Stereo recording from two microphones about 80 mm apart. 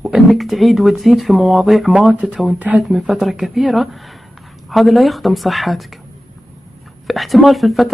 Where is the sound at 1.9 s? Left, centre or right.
Centre.